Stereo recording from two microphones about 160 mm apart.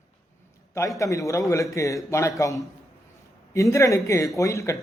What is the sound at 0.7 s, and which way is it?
Speech, 20° left (ahead or behind).